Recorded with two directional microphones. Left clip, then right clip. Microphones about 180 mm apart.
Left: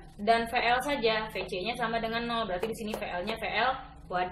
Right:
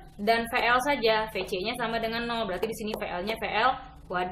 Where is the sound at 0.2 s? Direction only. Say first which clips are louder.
Right 1 dB; 45° right (ahead or behind).